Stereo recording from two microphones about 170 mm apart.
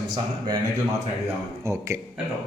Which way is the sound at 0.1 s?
25° right (ahead or behind).